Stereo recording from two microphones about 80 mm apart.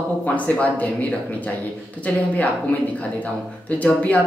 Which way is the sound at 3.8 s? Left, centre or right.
Centre.